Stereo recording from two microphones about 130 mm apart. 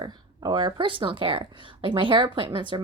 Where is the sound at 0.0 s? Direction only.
35° right (ahead or behind).